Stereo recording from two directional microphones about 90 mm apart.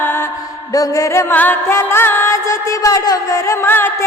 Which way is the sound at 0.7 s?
40° left (ahead or behind).